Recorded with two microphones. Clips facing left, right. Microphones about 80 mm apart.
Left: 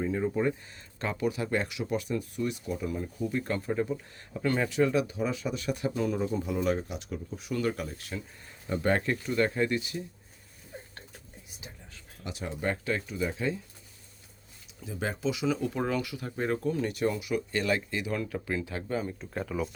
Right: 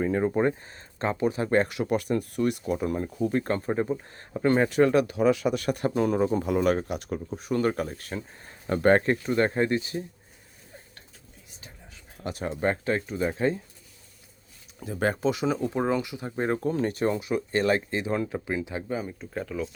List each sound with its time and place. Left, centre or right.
0.0 s speech: right
4.8 s speech: right
12.2 s speech: right
14.8 s speech: right
15.6 s speech: right
19.2 s speech: centre